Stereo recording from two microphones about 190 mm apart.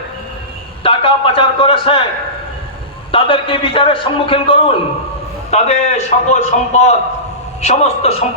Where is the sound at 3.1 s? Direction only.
25° left (ahead or behind).